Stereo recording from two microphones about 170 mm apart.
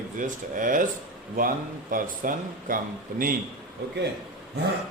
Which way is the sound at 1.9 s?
55° right (ahead or behind).